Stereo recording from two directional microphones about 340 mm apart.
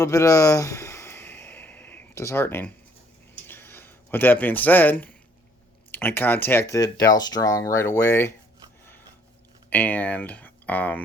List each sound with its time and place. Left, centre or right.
0.0 s a sound: centre
5.9 s speech: centre
9.6 s speech: centre